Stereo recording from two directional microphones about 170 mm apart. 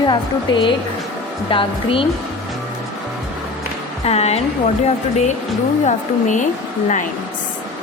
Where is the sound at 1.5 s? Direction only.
30° left (ahead or behind).